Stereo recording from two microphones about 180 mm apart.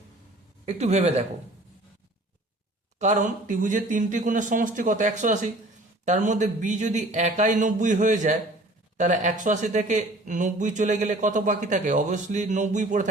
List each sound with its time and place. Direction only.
0.6 s speech: 40° right (ahead or behind)
3.0 s speech: 45° right (ahead or behind)